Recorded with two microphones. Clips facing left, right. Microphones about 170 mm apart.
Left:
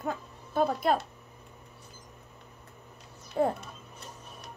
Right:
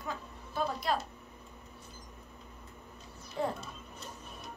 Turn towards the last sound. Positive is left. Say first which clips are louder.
# left 7 dB
turn(degrees=55)  # may be behind; listen again after turning